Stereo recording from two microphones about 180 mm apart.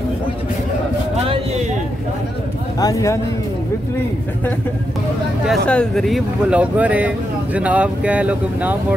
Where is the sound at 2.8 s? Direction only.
20° left (ahead or behind).